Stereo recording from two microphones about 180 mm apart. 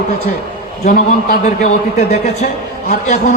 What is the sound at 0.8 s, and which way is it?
Speech, 40° left (ahead or behind).